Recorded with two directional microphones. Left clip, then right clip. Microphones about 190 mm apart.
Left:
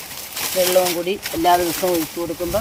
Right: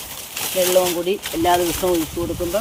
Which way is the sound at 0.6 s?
10° right (ahead or behind).